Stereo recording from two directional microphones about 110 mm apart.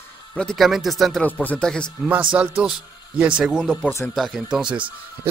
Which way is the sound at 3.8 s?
20° left (ahead or behind).